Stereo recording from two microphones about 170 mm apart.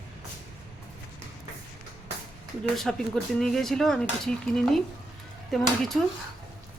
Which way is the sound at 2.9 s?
Centre (ahead or behind).